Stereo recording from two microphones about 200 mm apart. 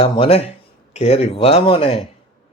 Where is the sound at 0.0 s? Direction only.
30° left (ahead or behind).